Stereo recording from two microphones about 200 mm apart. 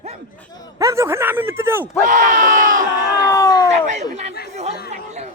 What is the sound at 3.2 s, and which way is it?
Cat, 15° left (ahead or behind).